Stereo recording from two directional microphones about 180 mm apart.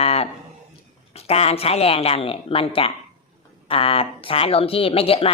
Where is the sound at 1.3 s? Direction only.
35° left (ahead or behind).